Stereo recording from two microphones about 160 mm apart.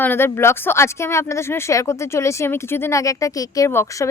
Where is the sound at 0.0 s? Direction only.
15° left (ahead or behind).